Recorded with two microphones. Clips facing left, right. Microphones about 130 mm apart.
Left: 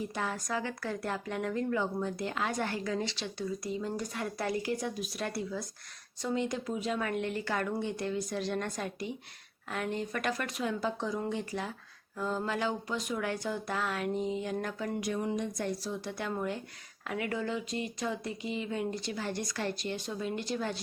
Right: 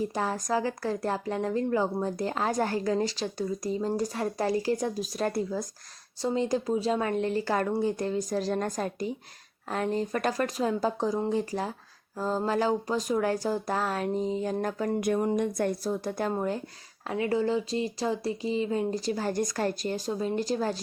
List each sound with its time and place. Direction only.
0.0 s speech: 35° right (ahead or behind)